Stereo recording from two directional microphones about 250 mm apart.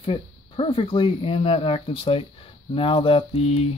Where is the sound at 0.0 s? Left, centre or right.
Left.